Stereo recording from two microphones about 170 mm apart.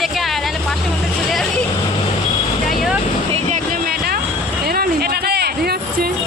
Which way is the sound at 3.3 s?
40° right (ahead or behind).